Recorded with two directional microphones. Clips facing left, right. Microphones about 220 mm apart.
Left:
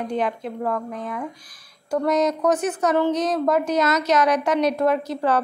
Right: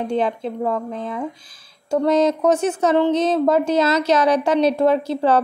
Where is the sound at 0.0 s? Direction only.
30° right (ahead or behind).